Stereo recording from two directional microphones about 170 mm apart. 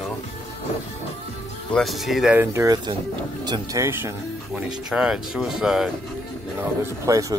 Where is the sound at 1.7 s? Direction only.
Centre (ahead or behind).